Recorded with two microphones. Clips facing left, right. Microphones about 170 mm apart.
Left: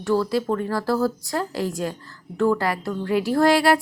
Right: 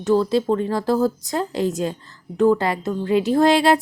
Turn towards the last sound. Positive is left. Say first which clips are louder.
# right 2 dB
turn(degrees=-20)  # may be behind; listen again after turning